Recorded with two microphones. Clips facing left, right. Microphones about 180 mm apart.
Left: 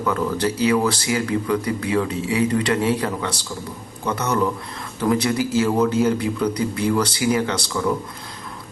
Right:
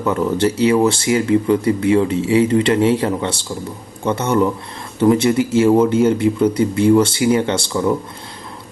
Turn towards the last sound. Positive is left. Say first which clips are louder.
# right 4 dB
turn(degrees=-25)  # may be behind; listen again after turning